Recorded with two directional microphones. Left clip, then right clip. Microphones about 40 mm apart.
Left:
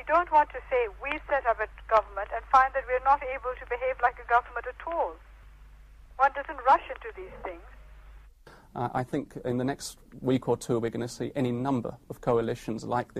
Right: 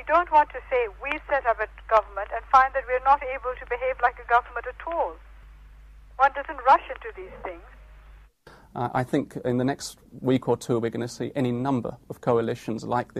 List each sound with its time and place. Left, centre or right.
0.0 s speech: right
8.5 s speech: right